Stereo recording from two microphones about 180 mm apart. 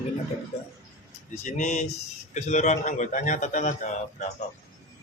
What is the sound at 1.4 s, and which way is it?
A man's voice, 40° left (ahead or behind).